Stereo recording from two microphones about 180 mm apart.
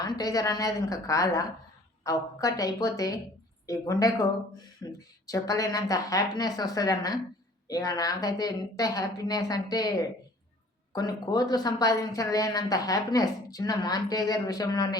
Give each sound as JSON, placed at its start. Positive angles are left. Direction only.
{"t": 0.0, "sound": "speech", "side_deg": 20}